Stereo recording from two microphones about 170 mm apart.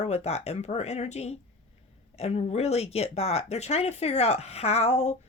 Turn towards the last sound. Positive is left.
turn(degrees=40)  # may be behind; listen again after turning